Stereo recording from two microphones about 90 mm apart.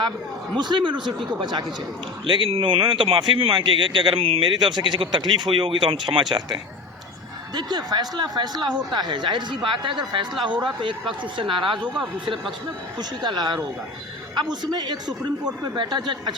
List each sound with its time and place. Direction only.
0.5 s speech: 55° right (ahead or behind)
2.2 s speech: 65° right (ahead or behind)
3.5 s speech: 65° right (ahead or behind)
13.0 s speech: 50° right (ahead or behind)